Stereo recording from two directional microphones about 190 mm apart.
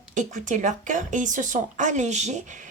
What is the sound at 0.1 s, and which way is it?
Speech, 40° right (ahead or behind).